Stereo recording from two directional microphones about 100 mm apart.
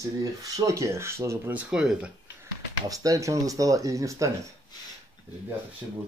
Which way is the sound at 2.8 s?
35° right (ahead or behind).